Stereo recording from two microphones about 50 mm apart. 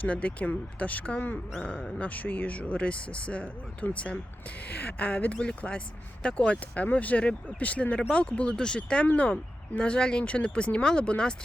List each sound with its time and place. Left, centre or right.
0.0 s speech: left
1.5 s speech: centre
2.0 s speech: left
9.0 s speech: left